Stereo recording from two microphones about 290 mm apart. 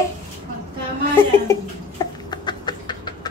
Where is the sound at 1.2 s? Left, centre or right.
Centre.